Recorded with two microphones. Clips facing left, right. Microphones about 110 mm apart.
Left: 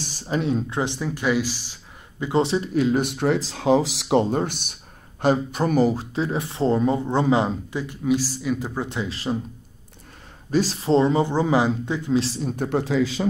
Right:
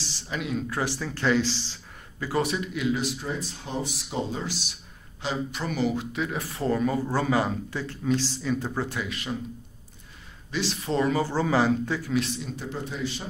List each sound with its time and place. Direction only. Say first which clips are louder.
0.0 s speech: left 8 dB; 45° left (ahead or behind); by 2.7 s 30° left (ahead or behind)
2.7 s speech: left 6 dB; 45° left (ahead or behind)
10.5 s speech: left 8 dB; 40° left (ahead or behind)
12.4 s speech: left 10 dB; 55° left (ahead or behind); by 13.0 s 80° left